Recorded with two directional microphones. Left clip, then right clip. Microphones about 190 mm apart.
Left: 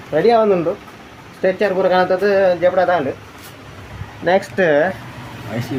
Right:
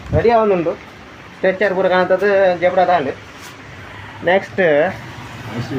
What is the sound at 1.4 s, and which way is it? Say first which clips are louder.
Speech: right 1 dB; 15° left (ahead or behind).